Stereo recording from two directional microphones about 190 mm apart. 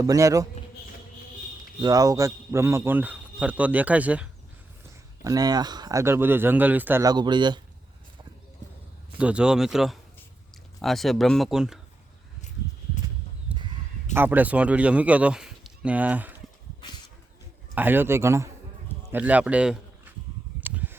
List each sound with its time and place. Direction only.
0.0 s speech: 15° right (ahead or behind)
1.8 s speech: 20° right (ahead or behind)
5.2 s speech: 20° right (ahead or behind)
9.1 s speech: 5° right (ahead or behind)
13.5 s a sound: 5° right (ahead or behind)
14.1 s speech: 10° right (ahead or behind)
17.7 s speech: 10° right (ahead or behind)
20.6 s a sound: 10° right (ahead or behind)